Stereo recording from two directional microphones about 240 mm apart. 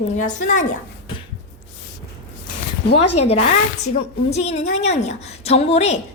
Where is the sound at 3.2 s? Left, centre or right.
Left.